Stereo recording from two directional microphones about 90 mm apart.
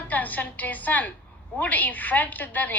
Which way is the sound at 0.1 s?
20° left (ahead or behind).